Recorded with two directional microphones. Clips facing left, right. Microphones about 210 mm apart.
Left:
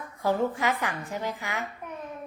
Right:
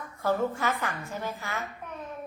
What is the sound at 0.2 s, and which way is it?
A child's voice, 15° left (ahead or behind).